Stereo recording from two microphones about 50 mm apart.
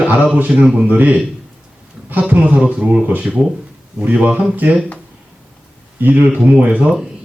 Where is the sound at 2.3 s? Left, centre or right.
Right.